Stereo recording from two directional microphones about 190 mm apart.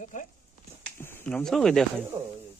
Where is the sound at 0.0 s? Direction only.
40° left (ahead or behind).